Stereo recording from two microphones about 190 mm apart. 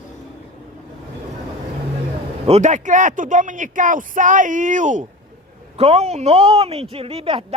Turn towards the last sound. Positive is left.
turn(degrees=-30)  # may be behind; listen again after turning